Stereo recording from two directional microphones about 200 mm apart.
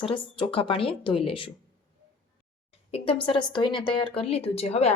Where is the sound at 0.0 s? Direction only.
25° left (ahead or behind).